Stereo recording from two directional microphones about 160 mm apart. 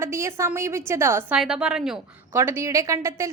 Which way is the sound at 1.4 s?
5° right (ahead or behind).